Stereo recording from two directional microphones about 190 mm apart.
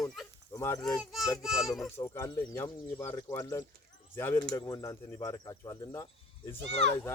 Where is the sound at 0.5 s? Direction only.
15° left (ahead or behind).